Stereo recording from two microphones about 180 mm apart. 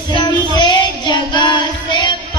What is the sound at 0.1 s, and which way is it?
Child singing, 25° left (ahead or behind).